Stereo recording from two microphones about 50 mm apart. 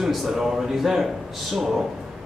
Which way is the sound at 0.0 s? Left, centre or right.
Centre.